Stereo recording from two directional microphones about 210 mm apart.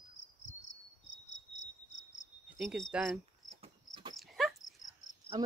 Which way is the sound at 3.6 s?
20° right (ahead or behind).